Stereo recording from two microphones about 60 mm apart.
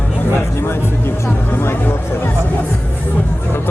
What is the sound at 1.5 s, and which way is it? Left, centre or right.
Music, left.